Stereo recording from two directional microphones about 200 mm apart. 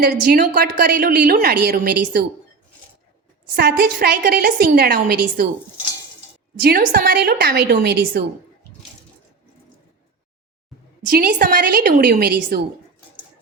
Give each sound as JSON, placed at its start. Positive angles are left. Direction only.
{"t": 0.0, "sound": "a woman's voice", "side_deg": -50}
{"t": 3.5, "sound": "a woman's voice", "side_deg": -50}
{"t": 6.6, "sound": "a woman's voice", "side_deg": -50}
{"t": 11.1, "sound": "a woman's voice", "side_deg": -45}